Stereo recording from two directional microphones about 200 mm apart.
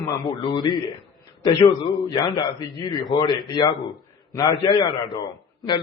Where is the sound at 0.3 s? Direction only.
20° left (ahead or behind).